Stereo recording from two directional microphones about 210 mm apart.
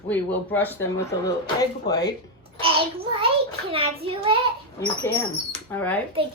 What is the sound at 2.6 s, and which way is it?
Child singing, 25° right (ahead or behind).